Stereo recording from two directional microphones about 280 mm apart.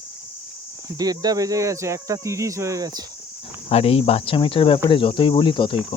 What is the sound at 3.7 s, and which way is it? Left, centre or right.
Speech, left.